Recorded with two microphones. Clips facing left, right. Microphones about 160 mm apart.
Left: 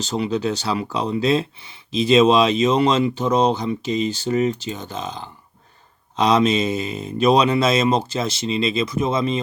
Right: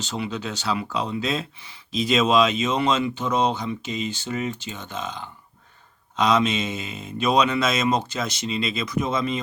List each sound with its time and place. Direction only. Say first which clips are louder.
0.0 s speech: left 7 dB; 40° left (ahead or behind)